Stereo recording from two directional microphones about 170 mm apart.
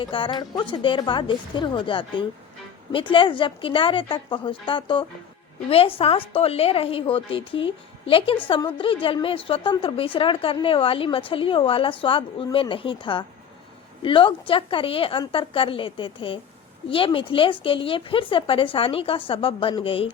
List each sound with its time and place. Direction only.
0.0 s a woman's voice: 30° left (ahead or behind)